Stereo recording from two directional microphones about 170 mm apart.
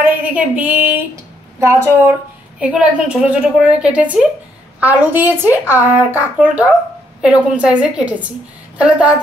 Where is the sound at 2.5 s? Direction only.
5° right (ahead or behind).